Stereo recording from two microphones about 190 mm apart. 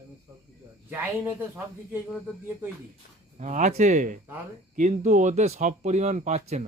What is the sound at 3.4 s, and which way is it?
Speech, 40° right (ahead or behind).